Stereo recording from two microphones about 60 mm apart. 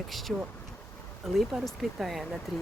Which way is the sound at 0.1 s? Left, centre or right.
Centre.